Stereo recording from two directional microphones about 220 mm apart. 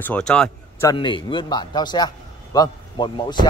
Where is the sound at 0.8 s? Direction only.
20° left (ahead or behind).